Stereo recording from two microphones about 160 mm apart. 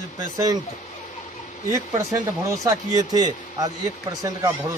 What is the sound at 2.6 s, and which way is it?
Speech, 25° right (ahead or behind).